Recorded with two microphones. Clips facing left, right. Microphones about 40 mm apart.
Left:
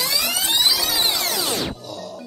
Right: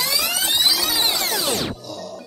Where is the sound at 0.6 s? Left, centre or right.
Centre.